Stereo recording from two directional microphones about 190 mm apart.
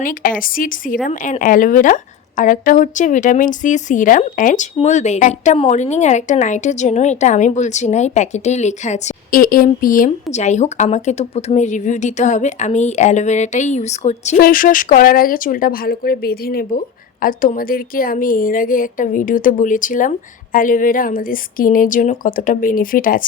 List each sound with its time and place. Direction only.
0.0 s a woman's voice: 45° left (ahead or behind)
14.3 s speech: 50° left (ahead or behind)